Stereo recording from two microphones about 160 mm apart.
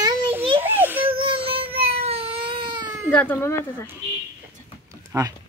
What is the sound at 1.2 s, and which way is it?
Baby cry, 35° right (ahead or behind).